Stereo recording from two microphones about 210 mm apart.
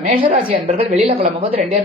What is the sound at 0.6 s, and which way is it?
Speech, 30° right (ahead or behind).